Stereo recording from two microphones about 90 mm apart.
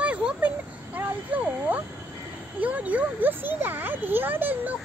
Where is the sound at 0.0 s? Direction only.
10° right (ahead or behind).